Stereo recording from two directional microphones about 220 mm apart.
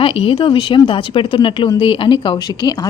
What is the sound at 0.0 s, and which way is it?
A woman's voice, 25° left (ahead or behind).